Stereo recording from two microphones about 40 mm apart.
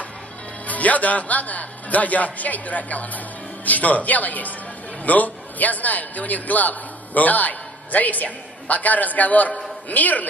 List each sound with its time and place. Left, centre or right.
0.7 s a man's voice: left